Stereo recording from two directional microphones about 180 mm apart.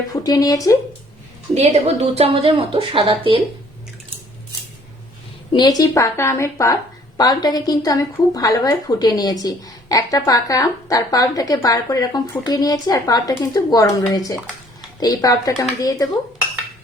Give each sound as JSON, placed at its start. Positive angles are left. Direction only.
{"t": 0.1, "sound": "a woman's voice", "side_deg": 20}
{"t": 1.5, "sound": "a woman's voice", "side_deg": -35}
{"t": 5.5, "sound": "a woman's voice", "side_deg": 20}